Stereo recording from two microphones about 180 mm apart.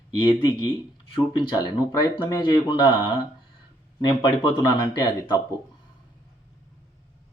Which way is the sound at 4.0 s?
30° left (ahead or behind).